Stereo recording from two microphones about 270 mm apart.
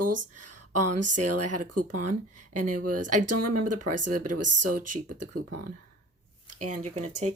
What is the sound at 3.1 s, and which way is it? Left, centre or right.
Speech, right.